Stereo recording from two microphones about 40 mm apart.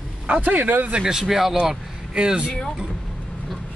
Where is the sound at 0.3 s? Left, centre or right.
Right.